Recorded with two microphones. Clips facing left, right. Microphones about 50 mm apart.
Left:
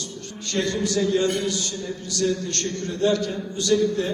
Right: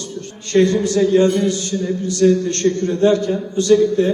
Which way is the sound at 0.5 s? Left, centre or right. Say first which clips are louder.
Right 9 dB; right.